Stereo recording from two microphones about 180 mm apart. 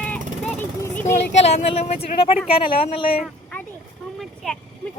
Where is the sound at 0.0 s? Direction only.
10° left (ahead or behind).